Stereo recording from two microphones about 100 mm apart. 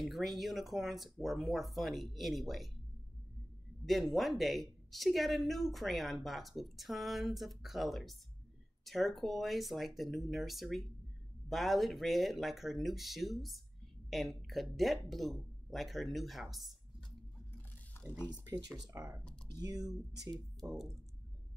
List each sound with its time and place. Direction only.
0.0 s a woman's voice: centre (ahead or behind)
3.8 s a woman's voice: centre (ahead or behind)
17.9 s a sound: 25° left (ahead or behind)
18.9 s speech: 30° right (ahead or behind)
20.6 s a woman's voice: centre (ahead or behind)